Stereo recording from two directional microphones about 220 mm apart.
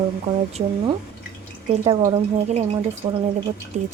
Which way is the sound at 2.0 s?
25° right (ahead or behind).